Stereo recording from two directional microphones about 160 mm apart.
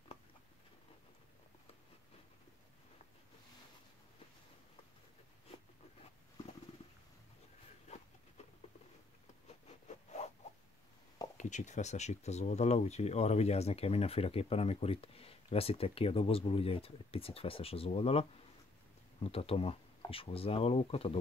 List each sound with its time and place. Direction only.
9.5 s zipper: 45° left (ahead or behind)
11.3 s speech: 50° left (ahead or behind)